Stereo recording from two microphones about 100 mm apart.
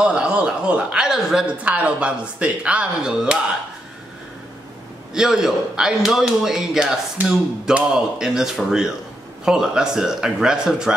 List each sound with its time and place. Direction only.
0.0 s speech: 10° right (ahead or behind)
1.6 s speech: 15° right (ahead or behind)
5.1 s a man's voice: 5° right (ahead or behind)